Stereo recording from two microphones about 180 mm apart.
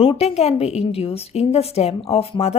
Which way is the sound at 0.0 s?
35° left (ahead or behind).